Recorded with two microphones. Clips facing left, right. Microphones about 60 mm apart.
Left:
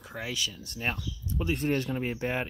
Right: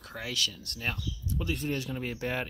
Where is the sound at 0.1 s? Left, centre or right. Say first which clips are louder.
Even; centre.